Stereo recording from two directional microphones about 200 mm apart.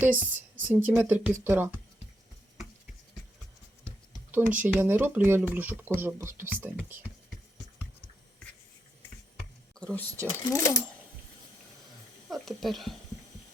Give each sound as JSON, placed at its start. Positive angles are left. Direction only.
{"t": 0.0, "sound": "speech", "side_deg": -10}
{"t": 4.3, "sound": "speech", "side_deg": -10}
{"t": 9.7, "sound": "speech", "side_deg": 5}
{"t": 12.3, "sound": "speech", "side_deg": 0}